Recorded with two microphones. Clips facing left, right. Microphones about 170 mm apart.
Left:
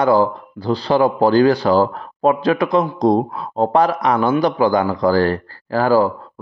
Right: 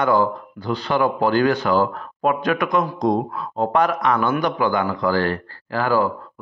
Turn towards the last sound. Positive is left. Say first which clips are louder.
# left 5 dB
turn(degrees=35)  # may be behind; listen again after turning